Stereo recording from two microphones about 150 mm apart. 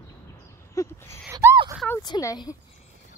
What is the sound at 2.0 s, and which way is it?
Speech, 25° left (ahead or behind).